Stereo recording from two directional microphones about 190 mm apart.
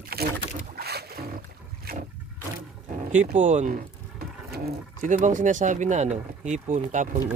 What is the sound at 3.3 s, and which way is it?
Speech, 40° right (ahead or behind).